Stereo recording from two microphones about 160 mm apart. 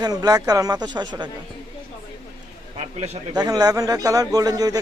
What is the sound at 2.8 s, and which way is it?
Speech, 40° right (ahead or behind).